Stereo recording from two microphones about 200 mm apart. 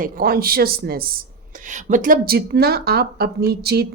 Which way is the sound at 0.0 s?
45° right (ahead or behind).